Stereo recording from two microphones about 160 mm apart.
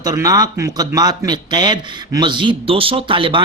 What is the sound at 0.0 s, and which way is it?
Speech, 25° right (ahead or behind).